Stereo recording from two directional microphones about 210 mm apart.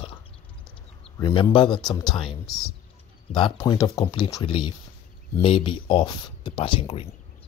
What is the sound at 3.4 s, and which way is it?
Speech, 20° left (ahead or behind).